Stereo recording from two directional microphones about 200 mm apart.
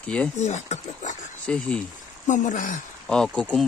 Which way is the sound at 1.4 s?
5° left (ahead or behind).